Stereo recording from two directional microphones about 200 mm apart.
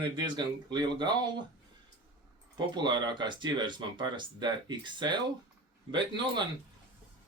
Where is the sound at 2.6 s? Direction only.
20° right (ahead or behind).